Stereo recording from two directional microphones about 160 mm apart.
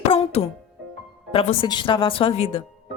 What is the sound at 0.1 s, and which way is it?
Music, 40° left (ahead or behind).